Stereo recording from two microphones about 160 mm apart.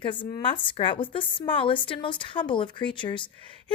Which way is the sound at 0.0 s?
30° left (ahead or behind).